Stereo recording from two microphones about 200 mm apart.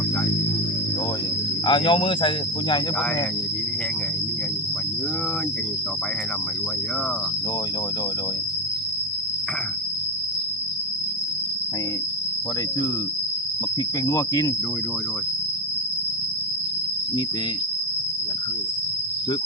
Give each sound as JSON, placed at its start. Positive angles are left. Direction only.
{"t": 1.6, "sound": "speech", "side_deg": 25}
{"t": 14.1, "sound": "cricket", "side_deg": 15}